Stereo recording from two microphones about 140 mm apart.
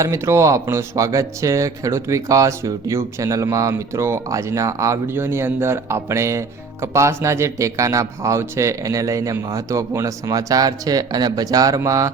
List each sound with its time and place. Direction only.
0.0 s speech: 20° right (ahead or behind)